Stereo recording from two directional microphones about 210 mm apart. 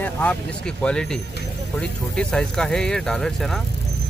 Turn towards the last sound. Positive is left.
turn(degrees=0)  # may be behind; listen again after turning